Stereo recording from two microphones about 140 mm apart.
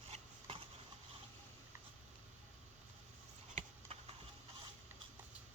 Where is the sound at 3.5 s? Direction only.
45° right (ahead or behind).